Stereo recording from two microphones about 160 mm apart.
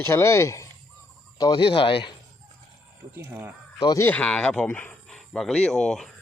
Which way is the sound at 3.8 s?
20° left (ahead or behind).